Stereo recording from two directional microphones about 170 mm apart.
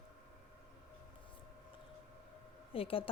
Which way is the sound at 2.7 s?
35° left (ahead or behind).